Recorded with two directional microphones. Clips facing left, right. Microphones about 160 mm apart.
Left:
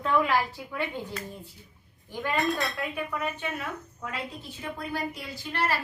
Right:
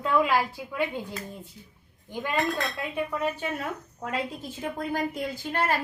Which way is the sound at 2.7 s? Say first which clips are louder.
Right 2 dB; 25° right (ahead or behind).